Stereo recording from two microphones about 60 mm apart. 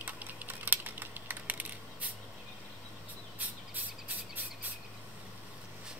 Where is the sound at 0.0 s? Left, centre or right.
Right.